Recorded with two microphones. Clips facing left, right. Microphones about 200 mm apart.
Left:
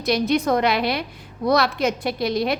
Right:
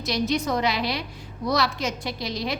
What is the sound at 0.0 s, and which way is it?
A woman's voice, 55° left (ahead or behind).